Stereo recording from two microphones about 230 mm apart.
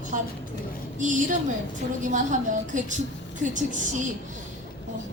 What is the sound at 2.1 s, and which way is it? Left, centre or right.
Speech, right.